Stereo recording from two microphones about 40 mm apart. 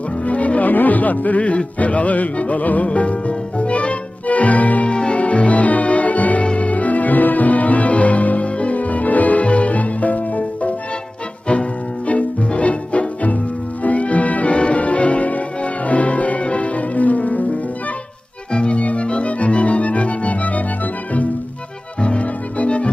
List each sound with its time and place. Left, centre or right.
0.2 s music: left
4.9 s music: left
12.1 s music: left
18.5 s music: left